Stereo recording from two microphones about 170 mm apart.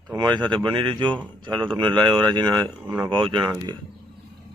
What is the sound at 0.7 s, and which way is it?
Speech, 30° right (ahead or behind).